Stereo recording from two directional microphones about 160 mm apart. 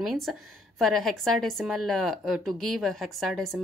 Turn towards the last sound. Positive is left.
turn(degrees=0)  # may be behind; listen again after turning